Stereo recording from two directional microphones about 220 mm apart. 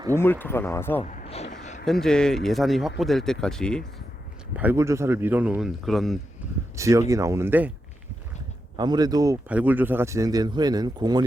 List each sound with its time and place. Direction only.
0.2 s speech: 10° left (ahead or behind)
1.0 s a sound: 35° left (ahead or behind)
1.8 s speech: centre (ahead or behind)
4.5 s speech: 10° right (ahead or behind)
6.7 s speech: 15° right (ahead or behind)
8.7 s speech: 20° right (ahead or behind)